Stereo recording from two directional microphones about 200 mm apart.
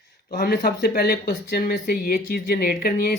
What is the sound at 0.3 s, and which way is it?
Speech, 50° left (ahead or behind).